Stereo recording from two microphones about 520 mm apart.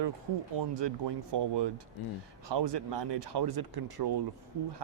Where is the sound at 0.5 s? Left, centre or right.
Right.